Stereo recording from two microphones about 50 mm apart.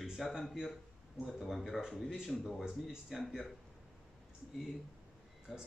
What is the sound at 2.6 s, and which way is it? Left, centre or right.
Speech, centre.